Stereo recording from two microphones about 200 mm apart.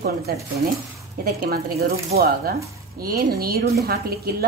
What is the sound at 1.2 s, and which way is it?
A woman's voice, 50° right (ahead or behind).